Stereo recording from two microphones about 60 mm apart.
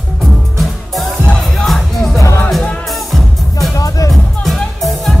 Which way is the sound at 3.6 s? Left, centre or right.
Left.